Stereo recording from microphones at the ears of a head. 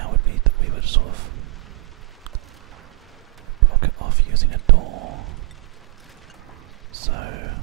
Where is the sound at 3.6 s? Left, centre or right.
Right.